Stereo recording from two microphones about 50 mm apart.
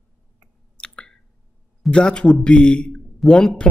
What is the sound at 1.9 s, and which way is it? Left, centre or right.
A man's voice, centre.